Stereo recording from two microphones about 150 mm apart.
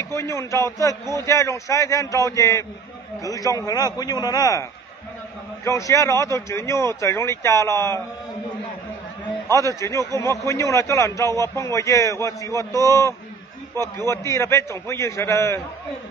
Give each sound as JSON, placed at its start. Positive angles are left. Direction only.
{"t": 0.0, "sound": "a man's voice", "side_deg": 20}
{"t": 9.5, "sound": "a man's voice", "side_deg": 20}